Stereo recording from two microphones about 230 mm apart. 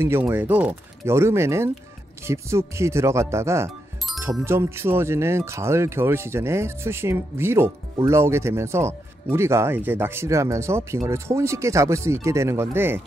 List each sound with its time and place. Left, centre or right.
0.0 s speech: centre
4.1 s music: centre
4.5 s speech: centre